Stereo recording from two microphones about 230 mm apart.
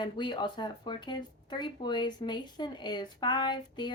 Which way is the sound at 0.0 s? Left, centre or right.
Centre.